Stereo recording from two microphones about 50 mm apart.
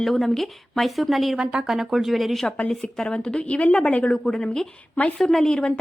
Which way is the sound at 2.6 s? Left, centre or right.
Centre.